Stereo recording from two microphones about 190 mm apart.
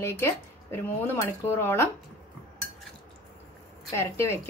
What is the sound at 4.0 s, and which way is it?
Speech, 15° left (ahead or behind).